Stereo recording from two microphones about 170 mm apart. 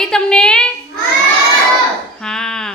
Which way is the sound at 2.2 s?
5° left (ahead or behind).